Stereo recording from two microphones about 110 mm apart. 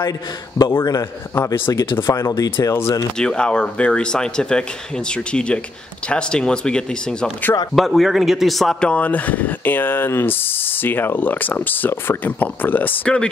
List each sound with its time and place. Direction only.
0.6 s speech: 30° left (ahead or behind)
1.9 s speech: 50° left (ahead or behind)
2.1 s speech: 30° left (ahead or behind)
3.2 s a man's voice: 5° left (ahead or behind)
8.9 s speech: 15° left (ahead or behind)